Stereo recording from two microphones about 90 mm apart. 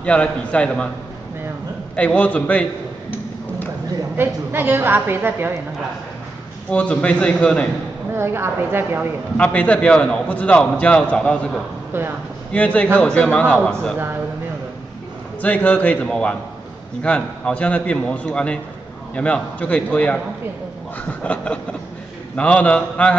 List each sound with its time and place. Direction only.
0.0 s a man's voice: 10° left (ahead or behind)
2.0 s a man's voice: 15° left (ahead or behind)
4.2 s a woman's voice: 25° right (ahead or behind)
6.7 s a man's voice: 15° left (ahead or behind)
8.1 s a woman's voice: 30° right (ahead or behind)
9.4 s a man's voice: 15° left (ahead or behind)
15.4 s a man's voice: 15° left (ahead or behind)
21.2 s a man's voice: 15° left (ahead or behind)